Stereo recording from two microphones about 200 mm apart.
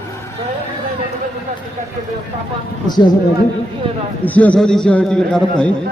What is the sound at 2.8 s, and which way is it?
Speech, 20° left (ahead or behind).